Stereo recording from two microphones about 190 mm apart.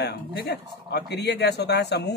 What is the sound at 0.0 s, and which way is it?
Speech, 60° left (ahead or behind).